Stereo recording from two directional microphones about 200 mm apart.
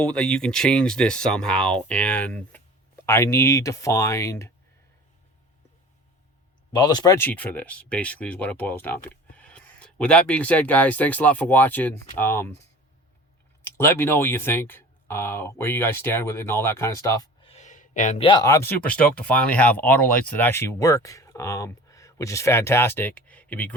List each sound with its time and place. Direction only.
0.0 s speech: 5° left (ahead or behind)
6.7 s speech: 20° left (ahead or behind)
13.7 s speech: 10° left (ahead or behind)
17.4 s a sound: 35° left (ahead or behind)
18.3 s speech: 20° left (ahead or behind)